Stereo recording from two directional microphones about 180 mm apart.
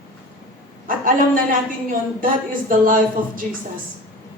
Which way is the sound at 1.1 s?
50° right (ahead or behind).